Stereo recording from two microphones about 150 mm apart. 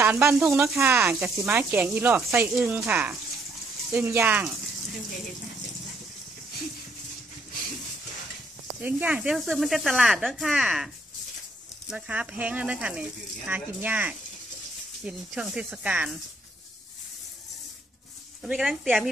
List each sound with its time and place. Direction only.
0.0 s speech: 15° right (ahead or behind)
8.8 s speech: 10° right (ahead or behind)
11.9 s speech: 5° right (ahead or behind)
18.4 s speech: centre (ahead or behind)